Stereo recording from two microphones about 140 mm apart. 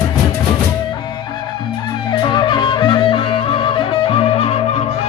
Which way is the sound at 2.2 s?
30° left (ahead or behind).